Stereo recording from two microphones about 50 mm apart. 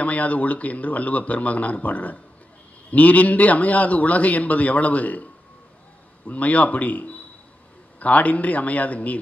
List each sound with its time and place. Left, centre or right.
0.0 s a man's voice: left